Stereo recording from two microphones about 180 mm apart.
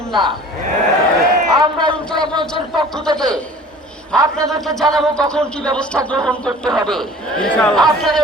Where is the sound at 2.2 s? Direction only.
25° right (ahead or behind).